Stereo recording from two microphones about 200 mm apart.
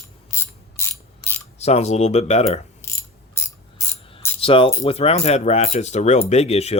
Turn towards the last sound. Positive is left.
turn(degrees=30)  # may be behind; listen again after turning